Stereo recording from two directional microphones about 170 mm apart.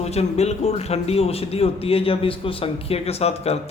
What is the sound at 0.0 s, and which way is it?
A man's voice, 40° left (ahead or behind).